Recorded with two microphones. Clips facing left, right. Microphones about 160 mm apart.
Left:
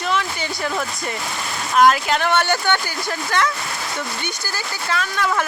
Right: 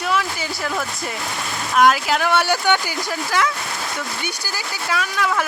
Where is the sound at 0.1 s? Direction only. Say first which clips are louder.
Even; 5° right (ahead or behind).